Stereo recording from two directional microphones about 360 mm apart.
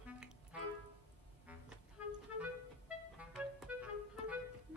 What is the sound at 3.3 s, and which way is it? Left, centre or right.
Music, centre.